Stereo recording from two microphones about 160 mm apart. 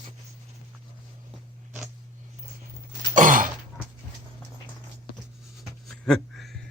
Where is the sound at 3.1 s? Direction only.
55° right (ahead or behind).